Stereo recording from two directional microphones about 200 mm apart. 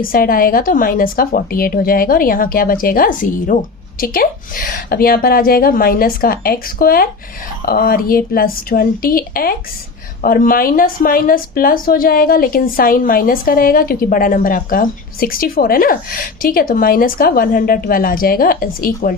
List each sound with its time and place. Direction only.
0.1 s speech: 45° left (ahead or behind)